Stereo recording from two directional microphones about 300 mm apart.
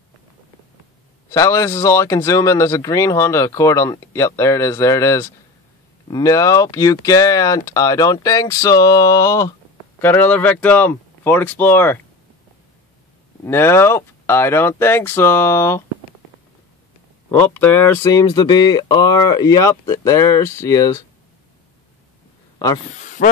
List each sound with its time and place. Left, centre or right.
1.3 s speech: centre
13.5 s speech: centre
17.3 s speech: centre
22.9 s a sound: left